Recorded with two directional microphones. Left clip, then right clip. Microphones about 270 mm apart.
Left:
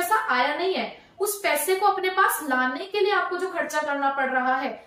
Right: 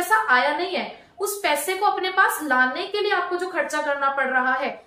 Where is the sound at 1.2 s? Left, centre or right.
Centre.